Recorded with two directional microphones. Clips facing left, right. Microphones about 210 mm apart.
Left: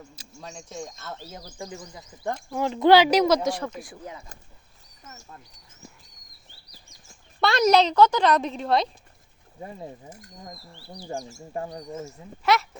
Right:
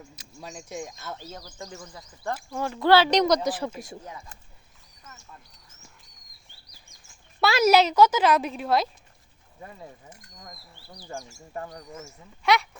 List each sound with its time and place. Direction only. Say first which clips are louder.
0.2 s a sound: left 2 dB; 30° left (ahead or behind)
0.7 s speech: right 1 dB; 15° right (ahead or behind)
1.3 s speech: left 2 dB; 15° left (ahead or behind); by 3.8 s 5° right (ahead or behind)
7.4 s a child's voice: even; 5° right (ahead or behind)
9.6 s speech: left 5 dB; 25° left (ahead or behind)
12.4 s a child's voice: even; centre (ahead or behind)